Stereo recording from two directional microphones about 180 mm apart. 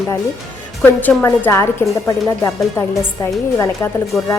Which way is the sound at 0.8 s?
10° left (ahead or behind).